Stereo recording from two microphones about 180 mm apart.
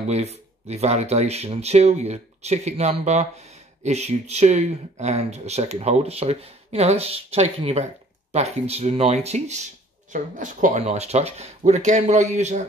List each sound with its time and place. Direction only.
0.1 s speech: 35° right (ahead or behind)